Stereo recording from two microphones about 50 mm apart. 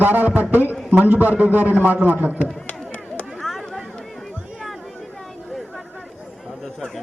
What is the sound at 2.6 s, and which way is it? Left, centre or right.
Chop, left.